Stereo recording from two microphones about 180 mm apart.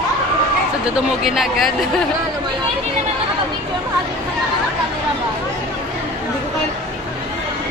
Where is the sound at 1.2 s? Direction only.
Centre (ahead or behind).